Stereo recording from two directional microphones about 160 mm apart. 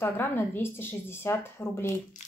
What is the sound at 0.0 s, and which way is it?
Speech, 15° left (ahead or behind).